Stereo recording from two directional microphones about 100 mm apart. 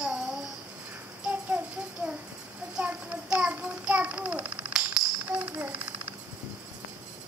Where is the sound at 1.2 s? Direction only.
15° right (ahead or behind).